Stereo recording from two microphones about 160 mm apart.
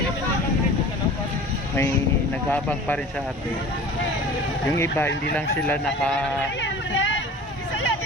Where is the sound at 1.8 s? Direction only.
15° left (ahead or behind).